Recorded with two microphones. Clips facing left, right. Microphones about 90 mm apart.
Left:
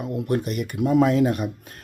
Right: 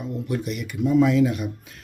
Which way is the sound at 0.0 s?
60° left (ahead or behind).